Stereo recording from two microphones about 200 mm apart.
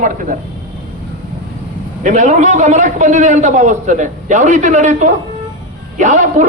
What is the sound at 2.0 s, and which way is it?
A man's voice, 40° right (ahead or behind).